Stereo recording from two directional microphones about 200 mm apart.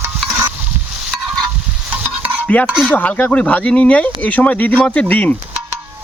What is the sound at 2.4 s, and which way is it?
Speech, 5° left (ahead or behind).